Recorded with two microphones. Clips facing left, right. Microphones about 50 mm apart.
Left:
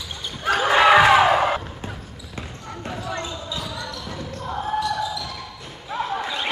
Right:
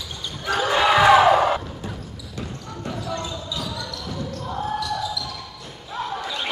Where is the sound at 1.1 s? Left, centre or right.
Centre.